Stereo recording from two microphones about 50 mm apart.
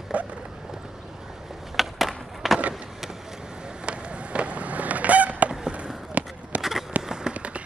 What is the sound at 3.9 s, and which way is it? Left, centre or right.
Skateboard, right.